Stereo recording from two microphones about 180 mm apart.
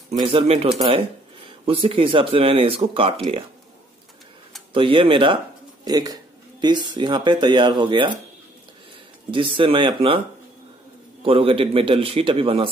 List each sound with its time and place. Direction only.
0.1 s speech: 35° right (ahead or behind)
4.7 s speech: 30° right (ahead or behind)
9.3 s speech: 30° right (ahead or behind)
11.2 s speech: 30° right (ahead or behind)